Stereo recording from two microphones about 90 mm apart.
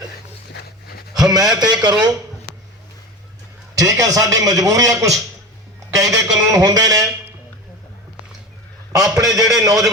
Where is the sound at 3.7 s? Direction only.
40° right (ahead or behind).